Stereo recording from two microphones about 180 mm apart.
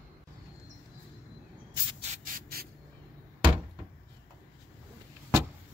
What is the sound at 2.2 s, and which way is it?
Owl, 55° right (ahead or behind).